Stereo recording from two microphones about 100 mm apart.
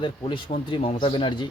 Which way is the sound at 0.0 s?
50° left (ahead or behind).